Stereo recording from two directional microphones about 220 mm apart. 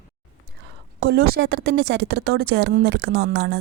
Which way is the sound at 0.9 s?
45° right (ahead or behind).